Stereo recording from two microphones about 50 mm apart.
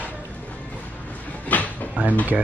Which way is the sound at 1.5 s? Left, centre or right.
Left.